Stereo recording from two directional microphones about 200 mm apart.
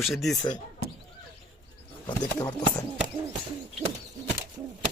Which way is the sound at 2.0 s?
20° left (ahead or behind).